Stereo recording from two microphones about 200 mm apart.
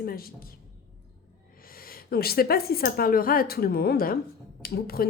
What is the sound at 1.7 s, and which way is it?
Speech, 45° left (ahead or behind).